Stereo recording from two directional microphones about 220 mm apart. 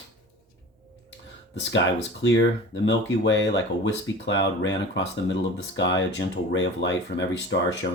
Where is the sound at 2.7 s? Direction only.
55° left (ahead or behind).